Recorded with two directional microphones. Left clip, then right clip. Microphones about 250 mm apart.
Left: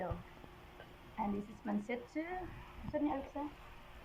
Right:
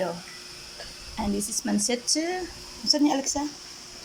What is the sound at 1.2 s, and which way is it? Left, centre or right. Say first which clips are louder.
Speech: right 11 dB; right.